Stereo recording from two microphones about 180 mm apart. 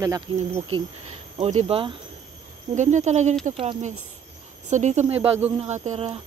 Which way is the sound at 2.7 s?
40° right (ahead or behind).